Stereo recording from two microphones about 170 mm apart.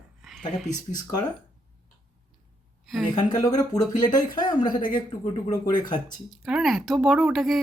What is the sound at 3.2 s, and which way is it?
Speech, 25° left (ahead or behind).